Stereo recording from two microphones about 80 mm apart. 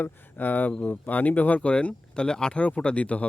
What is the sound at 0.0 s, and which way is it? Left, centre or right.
Speech, left.